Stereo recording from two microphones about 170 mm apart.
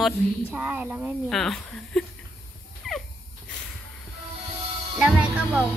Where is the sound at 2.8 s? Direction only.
Centre (ahead or behind).